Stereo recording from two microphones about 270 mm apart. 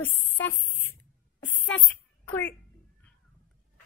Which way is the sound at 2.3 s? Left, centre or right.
Centre.